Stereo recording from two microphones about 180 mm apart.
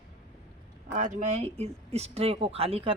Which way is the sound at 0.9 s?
45° right (ahead or behind).